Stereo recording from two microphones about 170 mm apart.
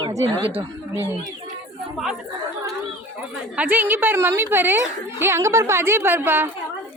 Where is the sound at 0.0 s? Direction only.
25° right (ahead or behind).